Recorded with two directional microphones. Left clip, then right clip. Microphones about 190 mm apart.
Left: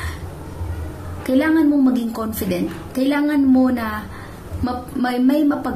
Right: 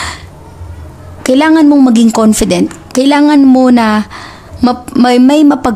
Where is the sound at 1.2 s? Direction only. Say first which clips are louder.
Right 10 dB; 55° right (ahead or behind).